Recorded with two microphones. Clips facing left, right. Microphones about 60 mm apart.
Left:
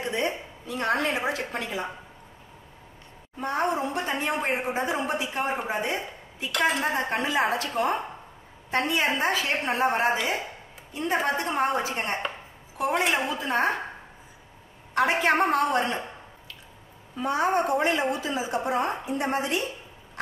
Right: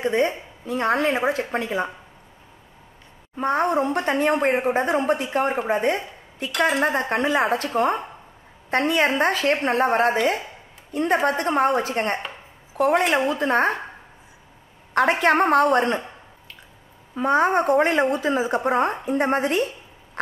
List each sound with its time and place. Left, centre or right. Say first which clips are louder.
0.0 s a woman's voice: right 7 dB; right
3.3 s a woman's voice: right 6 dB; right
8.6 s a woman's voice: right 5 dB; right
15.0 s a woman's voice: right 4 dB; right
17.1 s a woman's voice: right 5 dB; right